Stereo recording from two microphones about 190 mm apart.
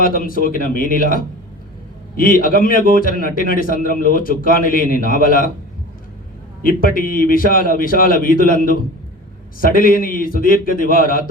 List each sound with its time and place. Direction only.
0.0 s a man's voice: 50° left (ahead or behind)
6.6 s a man's voice: 50° left (ahead or behind)